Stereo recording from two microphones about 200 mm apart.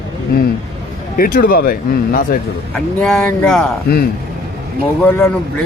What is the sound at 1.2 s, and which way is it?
Speech, 50° left (ahead or behind).